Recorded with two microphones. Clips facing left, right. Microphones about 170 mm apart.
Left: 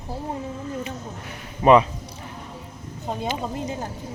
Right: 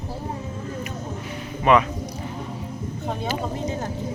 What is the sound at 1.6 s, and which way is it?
Speech, 30° left (ahead or behind).